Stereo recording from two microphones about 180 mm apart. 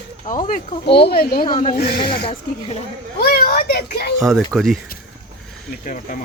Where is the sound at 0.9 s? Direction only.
65° left (ahead or behind).